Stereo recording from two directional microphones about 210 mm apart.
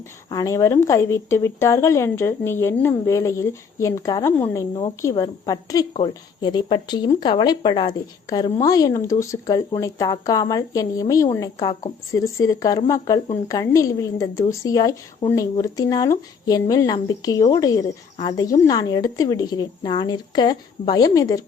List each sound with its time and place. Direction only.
0.3 s a woman's voice: 15° left (ahead or behind)